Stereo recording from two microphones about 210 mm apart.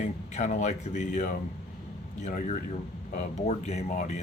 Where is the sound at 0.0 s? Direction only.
35° left (ahead or behind).